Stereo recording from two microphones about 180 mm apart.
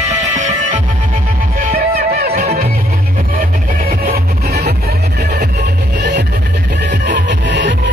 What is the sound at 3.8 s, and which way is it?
Music, 55° right (ahead or behind).